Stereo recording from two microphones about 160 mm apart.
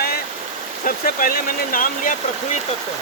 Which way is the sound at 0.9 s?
60° left (ahead or behind).